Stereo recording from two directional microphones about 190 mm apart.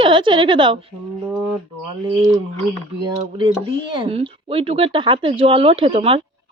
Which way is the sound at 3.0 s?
25° right (ahead or behind).